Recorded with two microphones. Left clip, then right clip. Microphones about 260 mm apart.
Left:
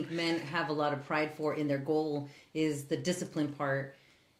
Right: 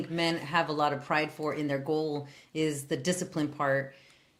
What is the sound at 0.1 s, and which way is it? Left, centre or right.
Speech, right.